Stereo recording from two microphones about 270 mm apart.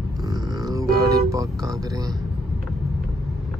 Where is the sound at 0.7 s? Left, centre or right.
Centre.